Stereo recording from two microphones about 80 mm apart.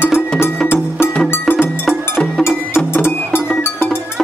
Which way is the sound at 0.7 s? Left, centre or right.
Left.